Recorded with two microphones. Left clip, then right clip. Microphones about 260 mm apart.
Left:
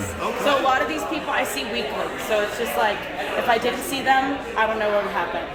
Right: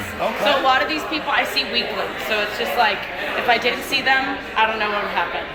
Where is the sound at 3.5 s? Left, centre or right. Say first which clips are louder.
Right 5 dB; left.